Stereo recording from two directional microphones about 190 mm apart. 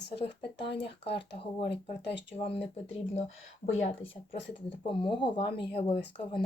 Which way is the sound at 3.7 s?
35° left (ahead or behind).